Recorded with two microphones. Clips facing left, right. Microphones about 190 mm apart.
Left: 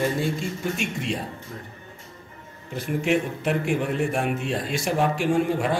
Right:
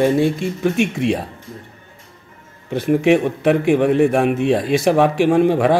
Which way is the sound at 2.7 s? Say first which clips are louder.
Right 9 dB; 70° right (ahead or behind).